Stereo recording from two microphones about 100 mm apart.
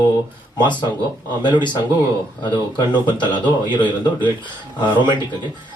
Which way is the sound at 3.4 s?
50° left (ahead or behind).